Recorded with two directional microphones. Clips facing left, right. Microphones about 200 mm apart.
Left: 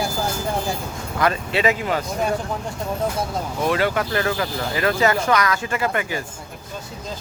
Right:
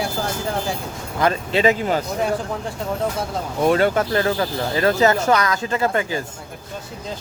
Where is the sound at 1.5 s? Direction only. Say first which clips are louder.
Right 4 dB; 35° right (ahead or behind).